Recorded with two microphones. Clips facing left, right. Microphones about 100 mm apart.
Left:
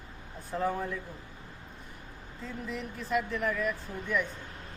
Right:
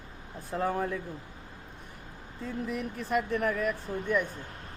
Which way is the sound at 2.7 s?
55° right (ahead or behind).